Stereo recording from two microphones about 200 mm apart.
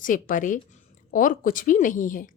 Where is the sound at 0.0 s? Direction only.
40° left (ahead or behind).